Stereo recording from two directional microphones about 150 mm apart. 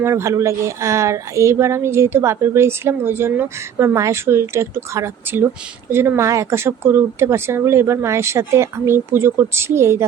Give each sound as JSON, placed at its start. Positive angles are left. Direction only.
{"t": 0.0, "sound": "speech", "side_deg": -20}